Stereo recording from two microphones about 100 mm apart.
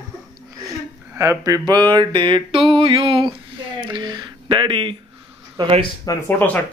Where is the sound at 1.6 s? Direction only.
50° right (ahead or behind).